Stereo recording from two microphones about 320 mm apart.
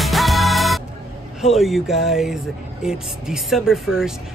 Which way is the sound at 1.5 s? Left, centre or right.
Centre.